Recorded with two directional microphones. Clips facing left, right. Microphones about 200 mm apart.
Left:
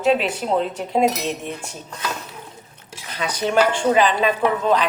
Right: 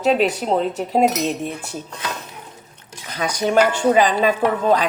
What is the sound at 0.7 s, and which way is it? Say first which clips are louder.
Speech: right 2 dB; 40° right (ahead or behind).